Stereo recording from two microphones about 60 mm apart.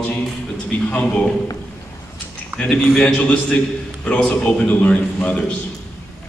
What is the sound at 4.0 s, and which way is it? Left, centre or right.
Speech, left.